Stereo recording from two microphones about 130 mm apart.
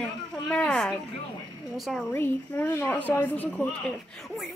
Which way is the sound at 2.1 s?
15° left (ahead or behind).